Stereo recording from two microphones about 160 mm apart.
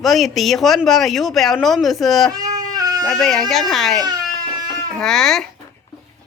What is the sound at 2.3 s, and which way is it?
Baby cry, 25° right (ahead or behind).